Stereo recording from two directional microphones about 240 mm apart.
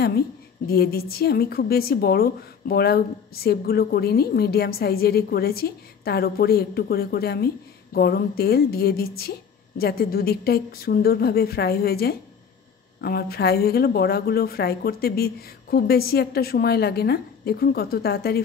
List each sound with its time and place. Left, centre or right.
0.7 s speech: left